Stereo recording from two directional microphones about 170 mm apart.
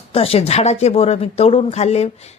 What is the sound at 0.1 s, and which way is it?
A woman's voice, 35° left (ahead or behind).